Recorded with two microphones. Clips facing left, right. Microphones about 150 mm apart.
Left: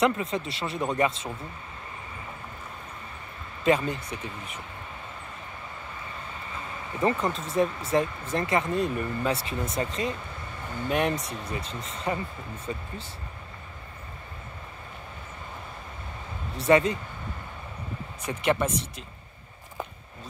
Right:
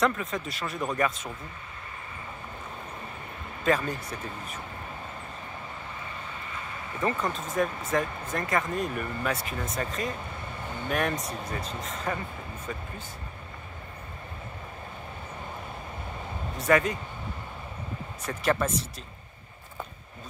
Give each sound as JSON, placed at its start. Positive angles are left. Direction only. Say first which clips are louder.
{"t": 0.0, "sound": "speech", "louder": "left 2 dB", "side_deg": 30}
{"t": 3.6, "sound": "speech", "louder": "left 3 dB", "side_deg": 20}
{"t": 7.0, "sound": "speech", "louder": "left 3 dB", "side_deg": 30}
{"t": 16.5, "sound": "speech", "louder": "left 3 dB", "side_deg": 25}
{"t": 18.2, "sound": "speech", "louder": "left 1 dB", "side_deg": 20}